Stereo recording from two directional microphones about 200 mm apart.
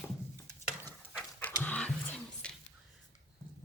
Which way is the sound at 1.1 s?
10° left (ahead or behind).